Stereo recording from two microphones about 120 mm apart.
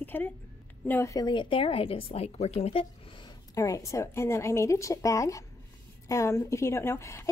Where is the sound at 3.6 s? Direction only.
25° left (ahead or behind).